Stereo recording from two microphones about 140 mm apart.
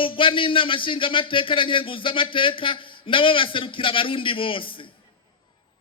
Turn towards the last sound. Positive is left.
turn(degrees=40)  # may be behind; listen again after turning